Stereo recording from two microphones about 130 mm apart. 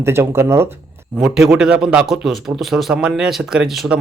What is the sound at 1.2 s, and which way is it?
A man's voice, 5° right (ahead or behind).